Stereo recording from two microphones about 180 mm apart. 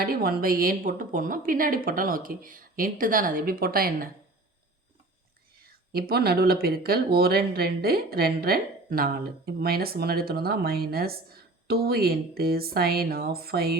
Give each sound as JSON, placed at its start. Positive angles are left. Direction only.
{"t": 0.0, "sound": "a woman's voice", "side_deg": -55}
{"t": 5.9, "sound": "speech", "side_deg": -60}